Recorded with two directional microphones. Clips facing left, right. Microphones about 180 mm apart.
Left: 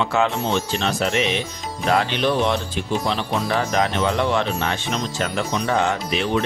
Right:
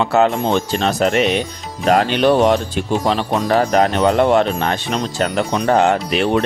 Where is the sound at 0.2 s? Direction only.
45° right (ahead or behind).